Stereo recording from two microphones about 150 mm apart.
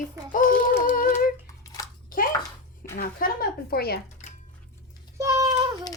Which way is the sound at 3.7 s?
90° left.